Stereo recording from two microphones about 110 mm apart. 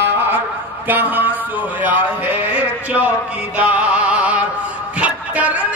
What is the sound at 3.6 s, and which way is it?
Music, 10° right (ahead or behind).